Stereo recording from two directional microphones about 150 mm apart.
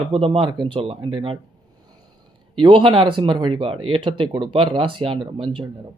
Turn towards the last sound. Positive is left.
turn(degrees=-30)  # may be behind; listen again after turning